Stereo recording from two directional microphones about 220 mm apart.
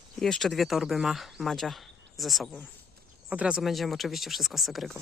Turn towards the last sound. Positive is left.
turn(degrees=0)  # may be behind; listen again after turning